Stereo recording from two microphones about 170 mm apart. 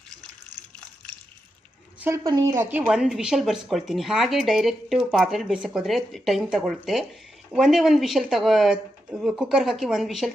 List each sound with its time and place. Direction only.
2.0 s speech: 15° right (ahead or behind)
2.7 s speech: 5° right (ahead or behind)